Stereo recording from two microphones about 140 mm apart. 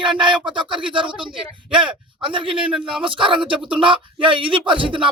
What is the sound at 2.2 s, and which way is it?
Speech, 35° right (ahead or behind).